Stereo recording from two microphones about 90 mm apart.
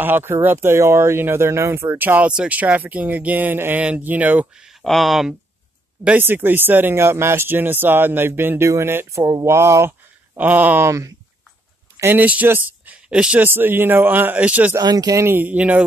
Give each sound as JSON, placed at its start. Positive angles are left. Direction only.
{"t": 0.0, "sound": "speech", "side_deg": -25}
{"t": 4.6, "sound": "speech", "side_deg": 0}
{"t": 6.0, "sound": "speech", "side_deg": -20}
{"t": 9.2, "sound": "speech", "side_deg": -40}
{"t": 9.5, "sound": "speech", "side_deg": -30}
{"t": 10.3, "sound": "speech", "side_deg": -20}
{"t": 10.9, "sound": "speech", "side_deg": -35}
{"t": 12.0, "sound": "speech", "side_deg": -20}
{"t": 13.5, "sound": "speech", "side_deg": -25}
{"t": 14.8, "sound": "speech", "side_deg": -45}
{"t": 15.2, "sound": "speech", "side_deg": -25}